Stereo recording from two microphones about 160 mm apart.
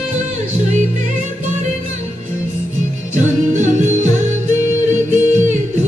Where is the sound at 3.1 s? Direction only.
50° right (ahead or behind).